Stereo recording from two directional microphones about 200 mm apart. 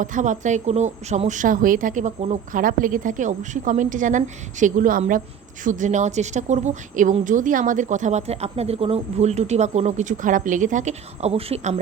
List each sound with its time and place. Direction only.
0.0 s a woman's voice: 40° right (ahead or behind)